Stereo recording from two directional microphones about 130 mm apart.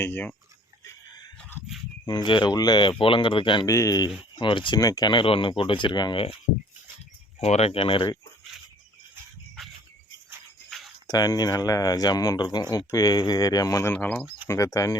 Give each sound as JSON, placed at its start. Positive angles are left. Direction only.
{"t": 0.0, "sound": "speech", "side_deg": 15}
{"t": 1.4, "sound": "chicken", "side_deg": 15}
{"t": 2.0, "sound": "speech", "side_deg": 40}
{"t": 3.7, "sound": "speech", "side_deg": 25}
{"t": 4.4, "sound": "speech", "side_deg": 40}
{"t": 7.3, "sound": "speech", "side_deg": 55}
{"t": 10.7, "sound": "a sound", "side_deg": 0}
{"t": 11.0, "sound": "speech", "side_deg": 30}
{"t": 13.9, "sound": "speech", "side_deg": 15}